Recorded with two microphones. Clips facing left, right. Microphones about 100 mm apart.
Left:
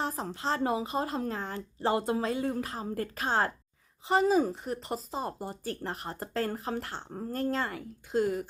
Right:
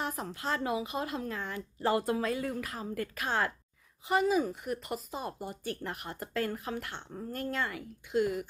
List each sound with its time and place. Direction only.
0.0 s speech: 35° left (ahead or behind)